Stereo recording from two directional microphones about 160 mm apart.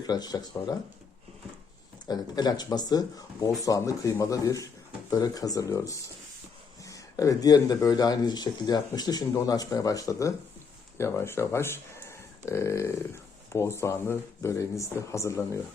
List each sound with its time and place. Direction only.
0.1 s speech: 25° left (ahead or behind)
2.0 s speech: 25° left (ahead or behind)